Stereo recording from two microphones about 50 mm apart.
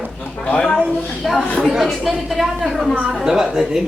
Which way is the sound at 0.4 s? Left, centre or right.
Left.